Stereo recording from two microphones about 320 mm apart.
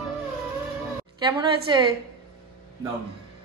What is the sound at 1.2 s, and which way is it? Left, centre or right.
Speech, centre.